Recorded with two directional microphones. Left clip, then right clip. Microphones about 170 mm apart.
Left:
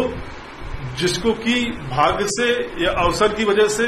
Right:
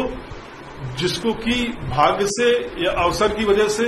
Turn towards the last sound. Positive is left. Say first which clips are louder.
# left 1 dB
turn(degrees=-5)  # may be behind; listen again after turning